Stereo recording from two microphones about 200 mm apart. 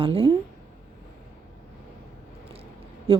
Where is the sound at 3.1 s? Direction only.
25° right (ahead or behind).